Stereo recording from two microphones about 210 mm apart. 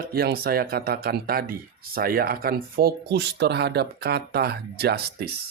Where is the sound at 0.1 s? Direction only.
45° right (ahead or behind).